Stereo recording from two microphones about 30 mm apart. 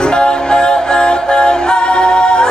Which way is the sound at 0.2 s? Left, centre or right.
Left.